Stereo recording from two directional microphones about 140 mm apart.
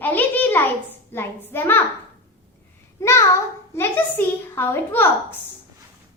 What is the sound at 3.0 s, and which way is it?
A child's voice, 20° left (ahead or behind).